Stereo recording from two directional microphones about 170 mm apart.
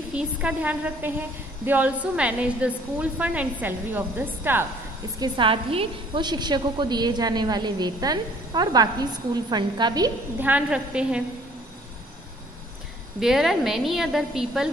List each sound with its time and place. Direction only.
0.1 s a woman's voice: 5° right (ahead or behind)
5.2 s a woman's voice: 30° right (ahead or behind)
10.4 s a woman's voice: 5° right (ahead or behind)
13.2 s a woman's voice: centre (ahead or behind)